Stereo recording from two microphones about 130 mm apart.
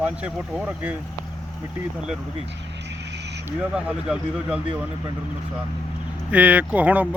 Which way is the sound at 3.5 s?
10° right (ahead or behind).